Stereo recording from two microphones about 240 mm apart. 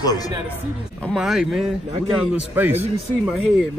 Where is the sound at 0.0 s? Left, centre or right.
Centre.